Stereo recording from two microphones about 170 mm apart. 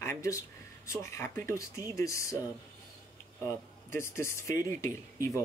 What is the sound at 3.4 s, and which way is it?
Speech, 15° left (ahead or behind).